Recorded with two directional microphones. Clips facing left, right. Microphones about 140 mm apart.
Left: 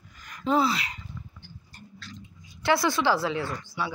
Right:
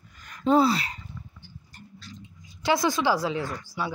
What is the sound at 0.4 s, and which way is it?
Speech, 35° right (ahead or behind).